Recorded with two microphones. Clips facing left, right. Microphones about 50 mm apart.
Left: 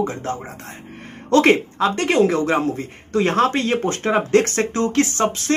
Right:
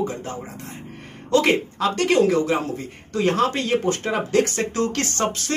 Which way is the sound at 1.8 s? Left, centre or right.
Left.